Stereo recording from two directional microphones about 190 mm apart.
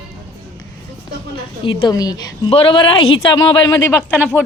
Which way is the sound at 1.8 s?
20° left (ahead or behind).